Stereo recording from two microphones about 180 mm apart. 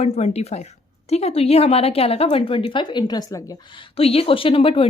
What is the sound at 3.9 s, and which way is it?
Speech, 35° left (ahead or behind).